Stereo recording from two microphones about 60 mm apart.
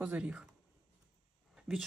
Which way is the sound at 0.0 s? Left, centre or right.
Centre.